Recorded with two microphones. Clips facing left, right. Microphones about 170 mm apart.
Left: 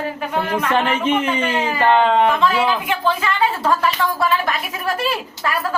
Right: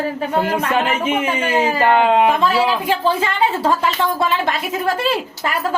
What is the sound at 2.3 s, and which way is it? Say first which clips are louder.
Speech: right 1 dB; 35° right (ahead or behind).